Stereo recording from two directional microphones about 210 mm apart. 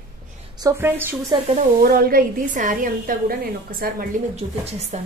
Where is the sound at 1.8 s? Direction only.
45° right (ahead or behind).